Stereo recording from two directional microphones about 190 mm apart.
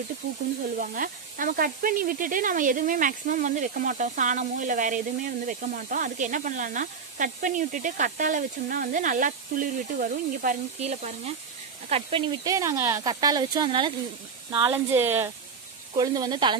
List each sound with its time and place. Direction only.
0.7 s speech: 45° right (ahead or behind); by 13.9 s 25° right (ahead or behind)
14.7 s speech: 10° right (ahead or behind)